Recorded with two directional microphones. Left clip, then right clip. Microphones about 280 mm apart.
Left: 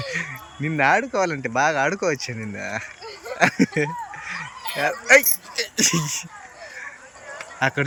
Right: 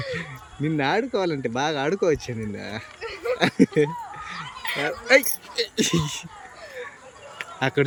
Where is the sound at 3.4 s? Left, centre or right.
Centre.